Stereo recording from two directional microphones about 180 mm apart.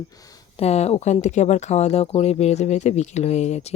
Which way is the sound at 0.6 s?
35° left (ahead or behind).